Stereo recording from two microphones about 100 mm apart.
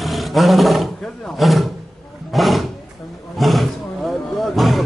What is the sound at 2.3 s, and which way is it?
Roaring cats, centre (ahead or behind).